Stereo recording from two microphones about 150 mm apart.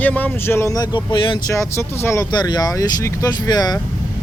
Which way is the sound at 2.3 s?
30° left (ahead or behind).